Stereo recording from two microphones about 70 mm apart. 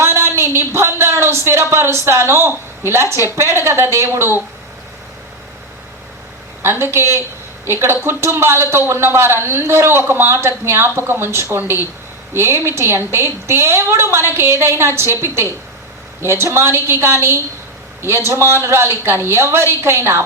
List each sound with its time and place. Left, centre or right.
0.0 s a sound: right
2.0 s a man's voice: right
6.6 s a man's voice: right